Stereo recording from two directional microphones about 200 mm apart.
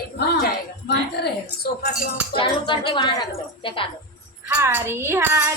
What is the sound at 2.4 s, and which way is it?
A woman's voice, 25° left (ahead or behind).